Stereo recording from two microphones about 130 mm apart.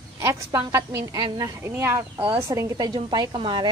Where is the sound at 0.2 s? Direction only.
25° right (ahead or behind).